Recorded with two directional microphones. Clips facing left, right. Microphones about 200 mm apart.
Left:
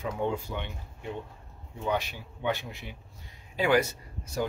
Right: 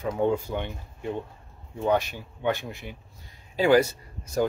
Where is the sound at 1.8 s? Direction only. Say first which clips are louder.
Right 6 dB; 45° right (ahead or behind).